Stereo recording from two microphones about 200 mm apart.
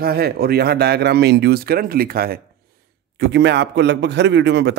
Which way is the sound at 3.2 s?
60° right (ahead or behind).